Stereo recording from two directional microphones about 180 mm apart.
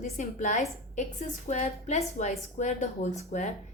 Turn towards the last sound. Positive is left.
turn(degrees=40)  # may be behind; listen again after turning